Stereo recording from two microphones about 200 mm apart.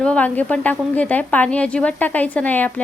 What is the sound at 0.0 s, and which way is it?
A woman's voice, 5° left (ahead or behind).